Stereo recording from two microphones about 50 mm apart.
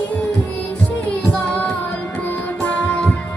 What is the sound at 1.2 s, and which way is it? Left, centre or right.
Child singing, left.